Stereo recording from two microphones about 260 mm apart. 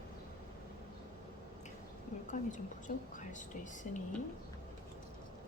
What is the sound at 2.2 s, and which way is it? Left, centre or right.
Speech, left.